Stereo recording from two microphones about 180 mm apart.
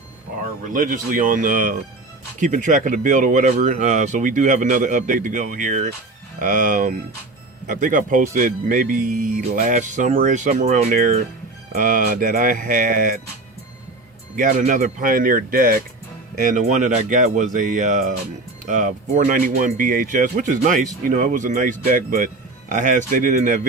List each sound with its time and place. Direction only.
0.6 s speech: 45° right (ahead or behind)
14.3 s speech: 45° right (ahead or behind)